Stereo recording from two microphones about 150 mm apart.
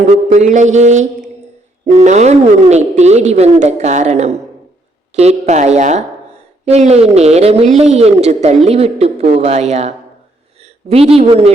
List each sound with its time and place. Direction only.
0.3 s a woman's voice: 55° right (ahead or behind)